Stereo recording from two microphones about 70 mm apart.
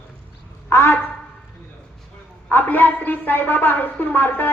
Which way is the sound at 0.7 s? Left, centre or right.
Left.